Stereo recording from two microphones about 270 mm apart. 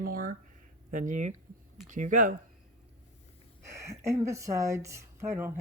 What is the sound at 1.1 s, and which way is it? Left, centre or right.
Speech, right.